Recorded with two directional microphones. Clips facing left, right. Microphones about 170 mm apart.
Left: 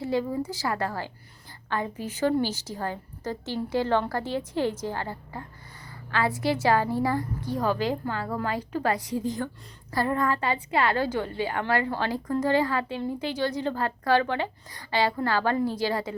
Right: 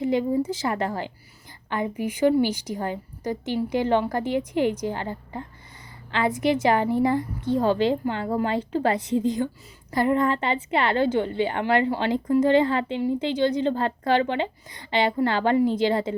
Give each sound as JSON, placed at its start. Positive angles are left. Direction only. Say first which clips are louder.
{"t": 0.0, "sound": "a woman's voice", "louder": "right 5 dB", "side_deg": -20}